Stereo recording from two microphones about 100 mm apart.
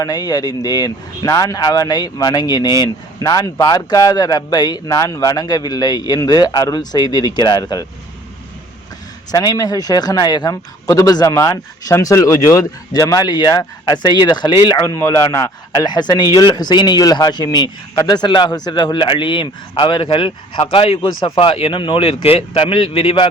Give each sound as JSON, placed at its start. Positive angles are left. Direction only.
{"t": 0.0, "sound": "speech", "side_deg": 40}
{"t": 9.3, "sound": "speech", "side_deg": 40}
{"t": 11.3, "sound": "speech", "side_deg": 30}
{"t": 14.8, "sound": "speech", "side_deg": 30}